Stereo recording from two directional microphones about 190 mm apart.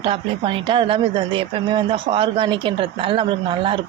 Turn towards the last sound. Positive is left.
turn(degrees=-25)  # may be behind; listen again after turning